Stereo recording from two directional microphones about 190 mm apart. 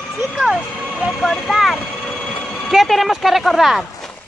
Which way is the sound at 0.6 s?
5° left (ahead or behind).